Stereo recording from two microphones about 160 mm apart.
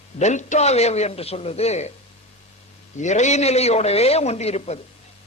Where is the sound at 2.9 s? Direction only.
50° left (ahead or behind).